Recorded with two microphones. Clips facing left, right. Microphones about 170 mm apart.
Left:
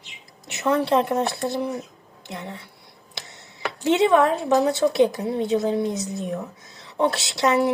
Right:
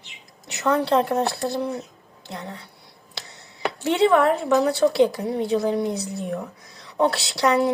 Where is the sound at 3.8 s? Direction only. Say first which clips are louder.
Even; 20° left (ahead or behind).